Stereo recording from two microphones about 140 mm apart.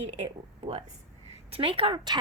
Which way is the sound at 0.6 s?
40° right (ahead or behind).